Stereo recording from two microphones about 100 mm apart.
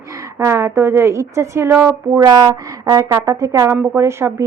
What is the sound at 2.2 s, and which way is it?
Speech, 45° right (ahead or behind).